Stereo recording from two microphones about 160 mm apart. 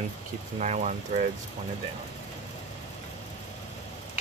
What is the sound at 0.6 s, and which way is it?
Speech, 45° right (ahead or behind).